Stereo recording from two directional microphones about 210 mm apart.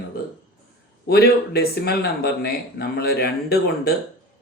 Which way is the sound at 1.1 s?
50° left (ahead or behind).